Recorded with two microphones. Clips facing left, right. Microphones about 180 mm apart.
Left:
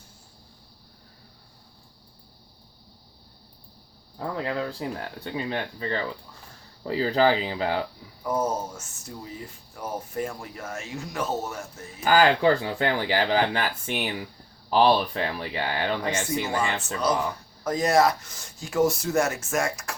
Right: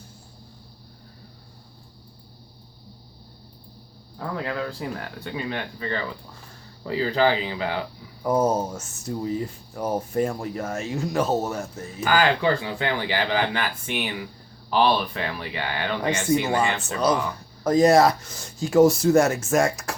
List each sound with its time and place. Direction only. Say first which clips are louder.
4.2 s speech: even; 25° left (ahead or behind)
8.2 s speech: right 5 dB; 40° right (ahead or behind)
12.0 s speech: left 2 dB; 40° left (ahead or behind)
17.6 s speech: right 5 dB; 35° right (ahead or behind)